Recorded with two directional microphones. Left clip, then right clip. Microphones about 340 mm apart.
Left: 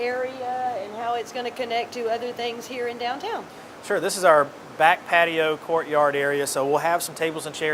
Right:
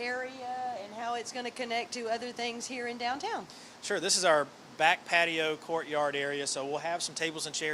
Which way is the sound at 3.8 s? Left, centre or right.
Centre.